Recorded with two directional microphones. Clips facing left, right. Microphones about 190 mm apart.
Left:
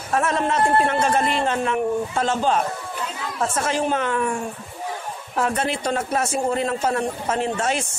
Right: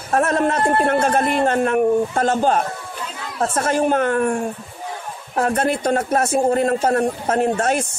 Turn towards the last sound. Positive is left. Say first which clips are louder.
# right 5 dB
turn(degrees=-50)  # may be behind; listen again after turning